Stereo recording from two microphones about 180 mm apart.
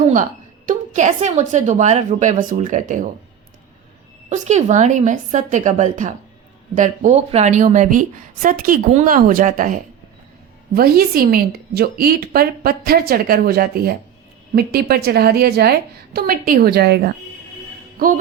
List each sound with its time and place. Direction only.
0.1 s a woman's voice: 45° right (ahead or behind)
4.3 s a woman's voice: 40° right (ahead or behind)
10.8 s a woman's voice: 55° right (ahead or behind)